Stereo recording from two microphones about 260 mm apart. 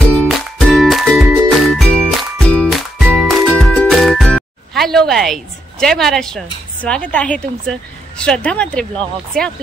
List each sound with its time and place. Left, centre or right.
0.1 s music: centre
8.2 s speech: centre